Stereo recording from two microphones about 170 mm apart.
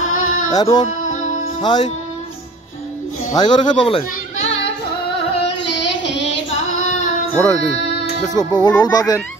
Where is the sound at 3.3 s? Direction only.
25° left (ahead or behind).